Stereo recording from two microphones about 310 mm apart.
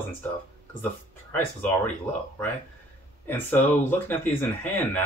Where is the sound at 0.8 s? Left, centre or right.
Centre.